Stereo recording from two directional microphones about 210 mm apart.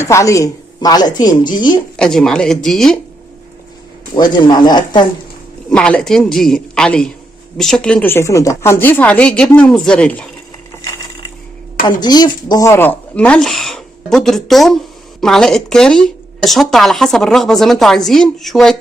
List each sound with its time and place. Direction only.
0.0 s a woman's voice: 15° left (ahead or behind)
2.0 s a woman's voice: centre (ahead or behind)
4.1 s a woman's voice: 20° left (ahead or behind)
5.7 s a woman's voice: 5° left (ahead or behind)
11.9 s a woman's voice: 20° left (ahead or behind); by 18.8 s centre (ahead or behind)